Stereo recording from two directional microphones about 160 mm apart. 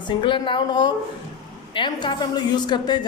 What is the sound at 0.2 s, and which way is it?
Speech, 30° left (ahead or behind).